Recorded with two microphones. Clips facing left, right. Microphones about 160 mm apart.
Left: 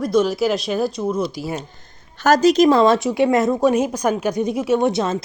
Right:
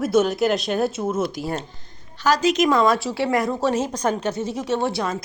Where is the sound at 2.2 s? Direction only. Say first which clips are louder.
Left 5 dB; 45° left (ahead or behind).